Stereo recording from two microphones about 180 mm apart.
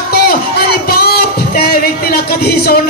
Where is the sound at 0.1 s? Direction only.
60° left (ahead or behind).